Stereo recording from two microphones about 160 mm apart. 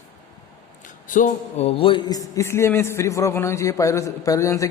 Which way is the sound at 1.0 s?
55° left (ahead or behind).